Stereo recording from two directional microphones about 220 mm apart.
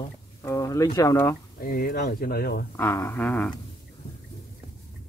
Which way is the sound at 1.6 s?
40° left (ahead or behind).